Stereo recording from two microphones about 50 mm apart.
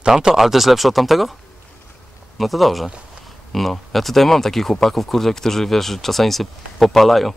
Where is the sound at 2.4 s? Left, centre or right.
Centre.